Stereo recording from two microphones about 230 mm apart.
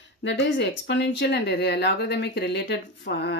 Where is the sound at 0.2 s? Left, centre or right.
Left.